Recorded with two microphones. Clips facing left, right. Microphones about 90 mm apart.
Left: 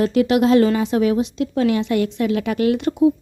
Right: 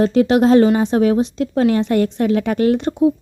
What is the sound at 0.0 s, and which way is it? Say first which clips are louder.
A woman's voice: right 3 dB; 35° right (ahead or behind).